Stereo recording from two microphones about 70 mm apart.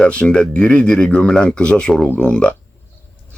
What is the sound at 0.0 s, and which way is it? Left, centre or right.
Speech, centre.